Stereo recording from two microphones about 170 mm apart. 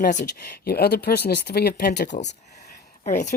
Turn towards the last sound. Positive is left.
turn(degrees=45)  # may be behind; listen again after turning